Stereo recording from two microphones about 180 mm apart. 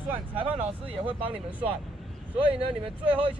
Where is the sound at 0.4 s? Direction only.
30° right (ahead or behind).